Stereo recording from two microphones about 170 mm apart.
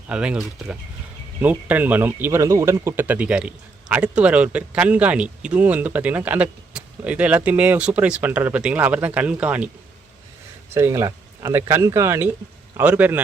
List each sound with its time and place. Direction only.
0.1 s speech: 5° right (ahead or behind)
10.8 s speech: 15° right (ahead or behind)